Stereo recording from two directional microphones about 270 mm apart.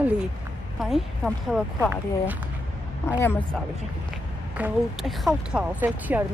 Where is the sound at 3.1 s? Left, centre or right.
Centre.